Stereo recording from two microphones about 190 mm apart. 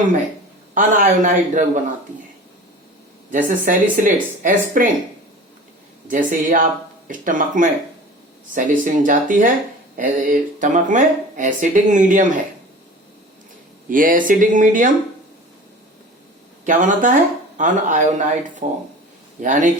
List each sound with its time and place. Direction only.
0.7 s speech: 45° right (ahead or behind)
3.3 s speech: 45° right (ahead or behind)
6.1 s speech: 45° right (ahead or behind)
13.9 s speech: 45° right (ahead or behind)
16.6 s speech: 45° right (ahead or behind)